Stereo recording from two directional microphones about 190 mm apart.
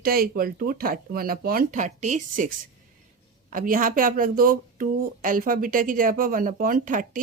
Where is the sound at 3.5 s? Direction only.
45° right (ahead or behind).